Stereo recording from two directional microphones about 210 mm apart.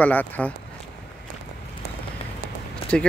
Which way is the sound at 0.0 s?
10° left (ahead or behind).